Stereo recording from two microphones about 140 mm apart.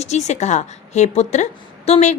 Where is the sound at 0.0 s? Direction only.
55° left (ahead or behind).